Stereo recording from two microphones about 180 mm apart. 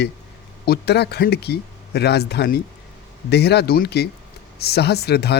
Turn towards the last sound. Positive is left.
turn(degrees=65)  # may be behind; listen again after turning